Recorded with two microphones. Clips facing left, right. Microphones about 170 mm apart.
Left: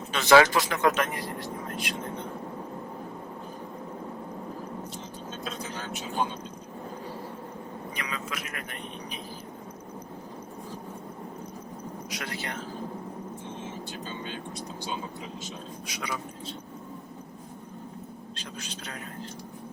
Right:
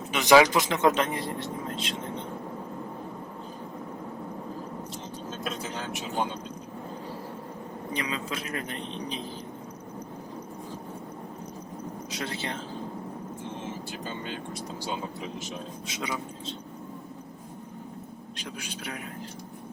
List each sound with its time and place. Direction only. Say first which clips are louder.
0.1 s speech: even; 15° right (ahead or behind)
7.9 s speech: right 5 dB; 25° right (ahead or behind)
12.1 s speech: right 3 dB; 25° right (ahead or behind)
15.9 s speech: right 2 dB; 25° right (ahead or behind)
18.3 s speech: right 4 dB; 10° right (ahead or behind)